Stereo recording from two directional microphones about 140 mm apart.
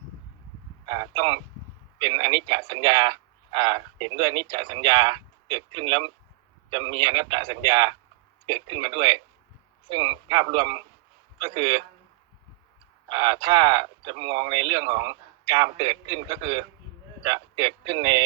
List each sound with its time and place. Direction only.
0.9 s speech: 35° right (ahead or behind)
13.1 s speech: 35° right (ahead or behind)